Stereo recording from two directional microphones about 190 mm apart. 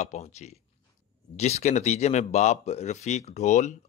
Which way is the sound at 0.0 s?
35° left (ahead or behind).